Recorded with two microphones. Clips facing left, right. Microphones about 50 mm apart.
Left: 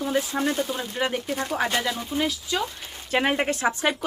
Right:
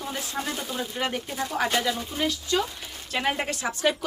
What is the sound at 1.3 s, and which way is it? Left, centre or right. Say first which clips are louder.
Speech: left 3 dB; left.